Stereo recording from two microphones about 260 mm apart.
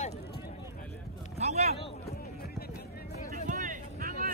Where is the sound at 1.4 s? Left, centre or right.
Right.